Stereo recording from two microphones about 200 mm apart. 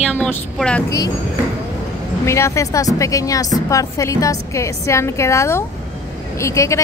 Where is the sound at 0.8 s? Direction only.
20° left (ahead or behind).